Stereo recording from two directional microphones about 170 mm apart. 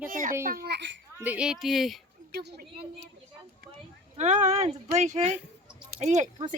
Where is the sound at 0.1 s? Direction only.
55° right (ahead or behind).